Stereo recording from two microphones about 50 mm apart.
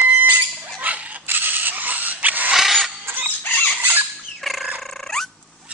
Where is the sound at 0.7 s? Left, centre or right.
Right.